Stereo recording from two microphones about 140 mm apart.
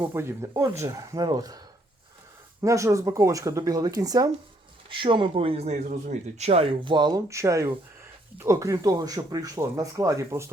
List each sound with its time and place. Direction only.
0.1 s speech: 20° right (ahead or behind)
4.9 s speech: 35° right (ahead or behind); by 10.5 s 20° right (ahead or behind)